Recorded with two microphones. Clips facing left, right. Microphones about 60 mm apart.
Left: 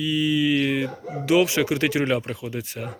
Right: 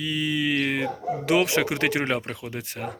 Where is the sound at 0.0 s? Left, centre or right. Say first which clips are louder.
Left 4 dB; right.